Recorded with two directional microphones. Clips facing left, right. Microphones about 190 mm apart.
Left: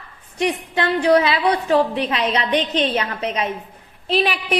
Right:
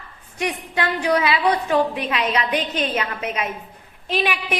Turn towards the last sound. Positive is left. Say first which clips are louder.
# left 4 dB
turn(degrees=35)  # may be behind; listen again after turning